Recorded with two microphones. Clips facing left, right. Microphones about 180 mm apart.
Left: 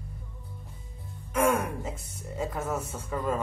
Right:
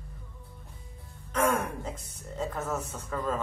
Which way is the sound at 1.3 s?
10° left (ahead or behind).